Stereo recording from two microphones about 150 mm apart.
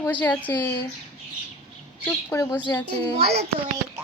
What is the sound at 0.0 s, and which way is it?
Speech, 10° left (ahead or behind).